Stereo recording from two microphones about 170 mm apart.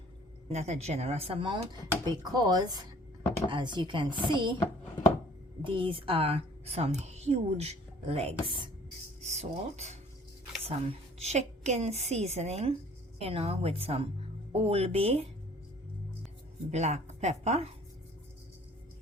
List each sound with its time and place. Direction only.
0.5 s a woman's voice: 40° right (ahead or behind)
5.6 s a woman's voice: 30° right (ahead or behind)
9.2 s a woman's voice: 40° right (ahead or behind)
16.7 s a woman's voice: 40° right (ahead or behind)